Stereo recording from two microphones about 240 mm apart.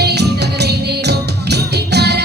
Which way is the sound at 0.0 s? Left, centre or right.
Right.